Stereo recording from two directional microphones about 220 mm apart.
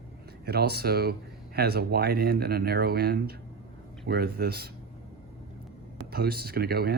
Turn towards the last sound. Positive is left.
turn(degrees=-45)  # may be behind; listen again after turning